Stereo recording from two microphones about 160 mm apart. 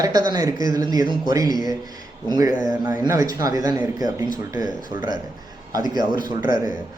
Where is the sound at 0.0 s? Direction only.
25° right (ahead or behind).